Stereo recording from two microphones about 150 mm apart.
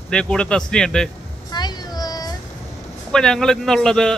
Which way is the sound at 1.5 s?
25° left (ahead or behind).